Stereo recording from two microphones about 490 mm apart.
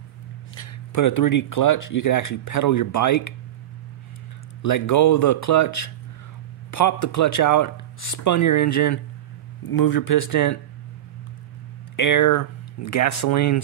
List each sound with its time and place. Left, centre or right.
0.6 s speech: left
4.6 s speech: left
12.0 s speech: left